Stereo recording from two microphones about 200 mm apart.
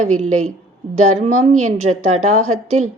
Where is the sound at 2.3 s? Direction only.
90° right.